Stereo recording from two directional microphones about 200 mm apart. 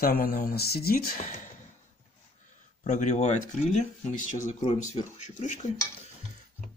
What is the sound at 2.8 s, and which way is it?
Speech, 35° left (ahead or behind).